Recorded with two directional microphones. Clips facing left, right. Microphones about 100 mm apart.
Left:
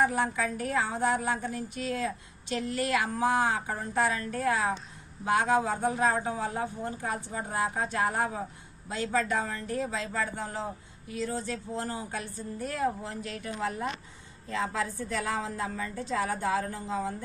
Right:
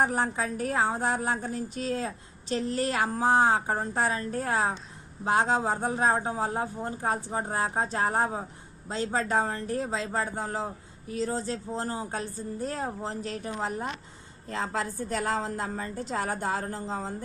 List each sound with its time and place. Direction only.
0.0 s speech: 35° right (ahead or behind)
14.5 s a woman's voice: 50° right (ahead or behind)
16.4 s speech: 35° right (ahead or behind)